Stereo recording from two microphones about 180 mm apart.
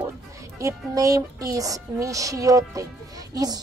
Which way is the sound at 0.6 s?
20° right (ahead or behind).